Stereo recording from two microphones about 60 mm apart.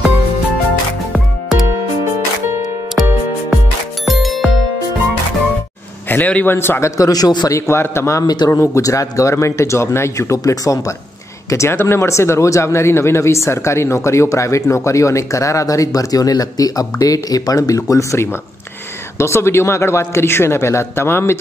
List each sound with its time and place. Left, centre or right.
4.0 s music: centre
6.0 s a man's voice: left
6.5 s speech: left
7.0 s a man's voice: left
7.8 s speech: left
8.5 s speech: left
8.8 s speech: left
11.5 s speech: left